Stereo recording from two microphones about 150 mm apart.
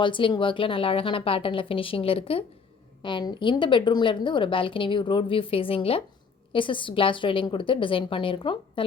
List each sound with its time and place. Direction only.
0.0 s a woman's voice: 35° left (ahead or behind)